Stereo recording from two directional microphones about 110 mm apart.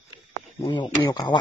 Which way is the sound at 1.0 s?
40° left (ahead or behind).